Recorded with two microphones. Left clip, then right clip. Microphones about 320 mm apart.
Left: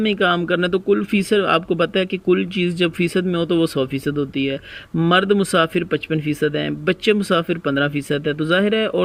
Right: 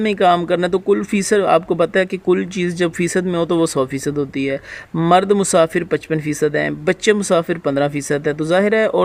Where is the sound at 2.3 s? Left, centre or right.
Centre.